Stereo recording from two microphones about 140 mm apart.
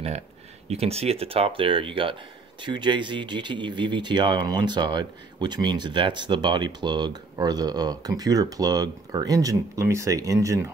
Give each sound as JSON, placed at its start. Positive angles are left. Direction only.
{"t": 0.7, "sound": "speech", "side_deg": -45}